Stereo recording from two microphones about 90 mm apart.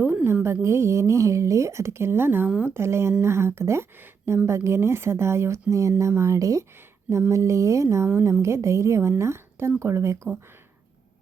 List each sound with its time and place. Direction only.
0.4 s a woman's voice: 30° right (ahead or behind)